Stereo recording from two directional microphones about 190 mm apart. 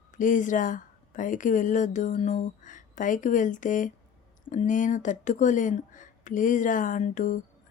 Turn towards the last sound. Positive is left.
turn(degrees=40)  # may be behind; listen again after turning